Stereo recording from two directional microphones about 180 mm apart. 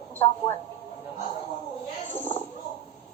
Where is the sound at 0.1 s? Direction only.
10° left (ahead or behind).